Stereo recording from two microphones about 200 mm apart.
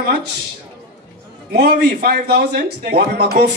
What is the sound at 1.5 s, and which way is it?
Speech, 50° right (ahead or behind).